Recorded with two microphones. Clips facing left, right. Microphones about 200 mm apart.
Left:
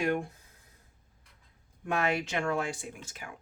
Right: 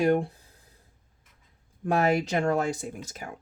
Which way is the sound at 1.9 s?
40° right (ahead or behind).